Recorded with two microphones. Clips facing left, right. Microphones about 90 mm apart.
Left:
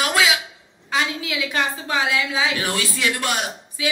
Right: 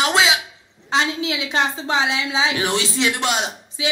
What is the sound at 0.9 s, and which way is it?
A man's voice, 25° right (ahead or behind).